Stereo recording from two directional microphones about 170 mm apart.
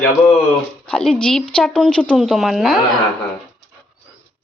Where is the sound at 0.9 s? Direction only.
5° left (ahead or behind).